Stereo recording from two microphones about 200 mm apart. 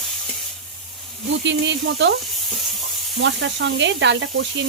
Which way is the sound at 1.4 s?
60° right (ahead or behind).